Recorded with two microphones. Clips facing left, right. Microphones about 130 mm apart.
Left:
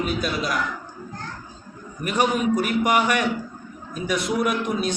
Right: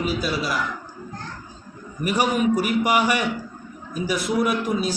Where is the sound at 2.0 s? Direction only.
5° right (ahead or behind).